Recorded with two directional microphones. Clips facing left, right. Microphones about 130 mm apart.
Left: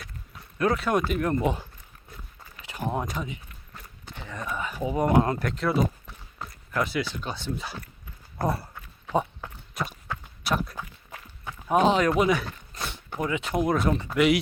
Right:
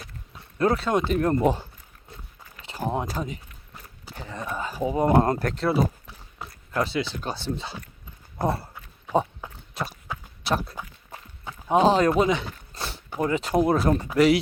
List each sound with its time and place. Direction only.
0.6 s speech: 30° right (ahead or behind)
2.7 s a sound: 30° right (ahead or behind)
3.1 s speech: 35° right (ahead or behind)
5.7 s a sound: 5° right (ahead or behind)
6.7 s speech: 25° right (ahead or behind)
9.1 s speech: 10° right (ahead or behind)
9.7 s horse: 35° right (ahead or behind)
10.4 s speech: 30° right (ahead or behind)
11.1 s a sound: 25° right (ahead or behind)
13.2 s speech: 35° right (ahead or behind)